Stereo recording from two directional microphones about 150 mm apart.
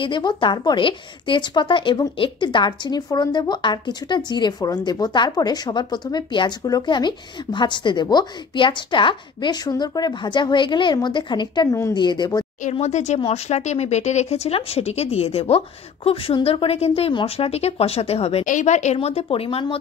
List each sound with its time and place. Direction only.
0.0 s a woman's voice: 30° left (ahead or behind)
12.7 s speech: 50° left (ahead or behind)
18.4 s speech: 55° left (ahead or behind)
18.9 s speech: 40° left (ahead or behind)